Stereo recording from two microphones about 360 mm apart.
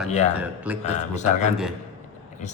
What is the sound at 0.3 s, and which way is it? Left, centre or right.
Speech, centre.